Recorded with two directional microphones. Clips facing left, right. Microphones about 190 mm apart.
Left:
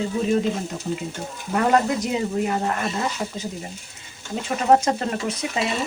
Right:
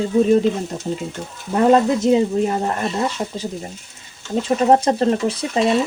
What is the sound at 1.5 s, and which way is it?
Speech, 25° right (ahead or behind).